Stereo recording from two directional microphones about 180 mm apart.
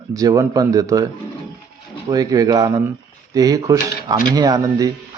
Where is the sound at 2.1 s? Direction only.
20° right (ahead or behind).